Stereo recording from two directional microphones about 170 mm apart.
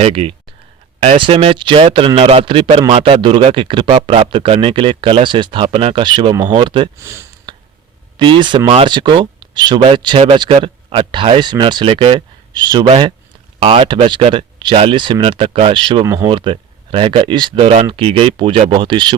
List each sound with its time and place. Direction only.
0.0 s speech: 35° right (ahead or behind)
7.0 s speech: 15° right (ahead or behind)
7.5 s finger snapping: 30° right (ahead or behind)
8.2 s speech: 25° right (ahead or behind)
16.0 s speech: 15° right (ahead or behind)
16.3 s speech: 30° right (ahead or behind)